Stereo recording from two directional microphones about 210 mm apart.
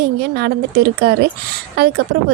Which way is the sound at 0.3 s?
50° right (ahead or behind).